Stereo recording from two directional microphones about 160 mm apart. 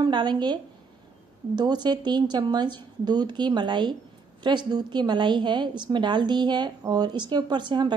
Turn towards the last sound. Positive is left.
turn(degrees=-30)  # may be behind; listen again after turning